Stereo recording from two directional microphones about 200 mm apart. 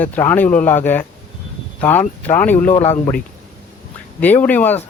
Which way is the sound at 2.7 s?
30° left (ahead or behind).